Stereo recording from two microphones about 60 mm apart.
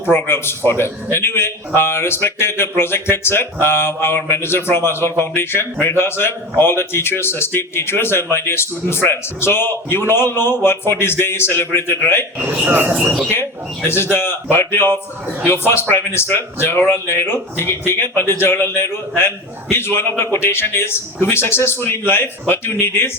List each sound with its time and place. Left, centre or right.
0.1 s a man's voice: left
12.6 s speech: right
13.3 s a man's voice: left